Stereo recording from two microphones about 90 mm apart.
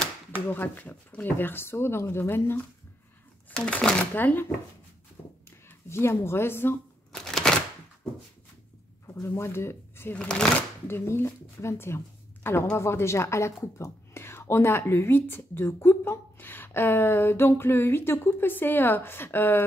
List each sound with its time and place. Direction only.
0.5 s speech: 20° left (ahead or behind)
3.5 s speech: 10° left (ahead or behind)
4.1 s speech: 20° left (ahead or behind)
5.9 s speech: 30° left (ahead or behind)
7.1 s a sound: 5° left (ahead or behind)
9.0 s speech: 30° left (ahead or behind)
10.1 s speech: 10° left (ahead or behind)
10.9 s speech: 25° left (ahead or behind)